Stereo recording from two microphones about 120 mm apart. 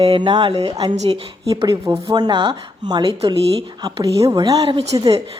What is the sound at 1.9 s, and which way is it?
Speech, 40° right (ahead or behind).